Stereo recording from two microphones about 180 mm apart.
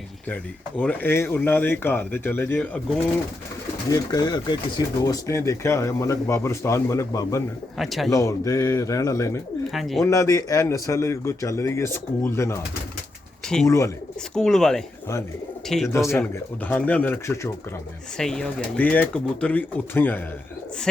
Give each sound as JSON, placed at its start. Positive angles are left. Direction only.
{"t": 0.8, "sound": "a man's voice", "side_deg": 10}
{"t": 3.8, "sound": "a man's voice", "side_deg": 20}
{"t": 7.8, "sound": "speech", "side_deg": 0}
{"t": 8.1, "sound": "a man's voice", "side_deg": 20}
{"t": 9.7, "sound": "speech", "side_deg": 0}
{"t": 10.0, "sound": "a man's voice", "side_deg": 15}
{"t": 13.7, "sound": "a man's voice", "side_deg": 15}
{"t": 14.3, "sound": "a man's voice", "side_deg": 5}
{"t": 18.2, "sound": "a man's voice", "side_deg": 5}